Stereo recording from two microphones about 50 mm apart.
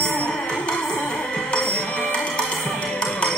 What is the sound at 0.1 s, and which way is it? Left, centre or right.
Music, left.